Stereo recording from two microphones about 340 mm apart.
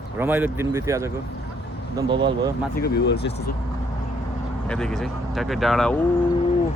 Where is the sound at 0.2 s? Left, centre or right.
Centre.